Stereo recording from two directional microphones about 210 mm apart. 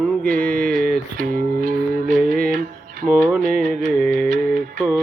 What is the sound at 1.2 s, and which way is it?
Music, 40° right (ahead or behind).